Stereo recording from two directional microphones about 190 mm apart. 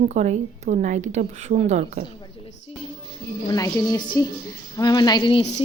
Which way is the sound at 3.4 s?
20° left (ahead or behind).